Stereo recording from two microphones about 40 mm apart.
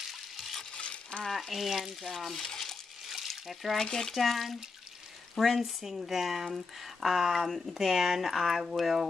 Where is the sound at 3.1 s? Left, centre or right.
Centre.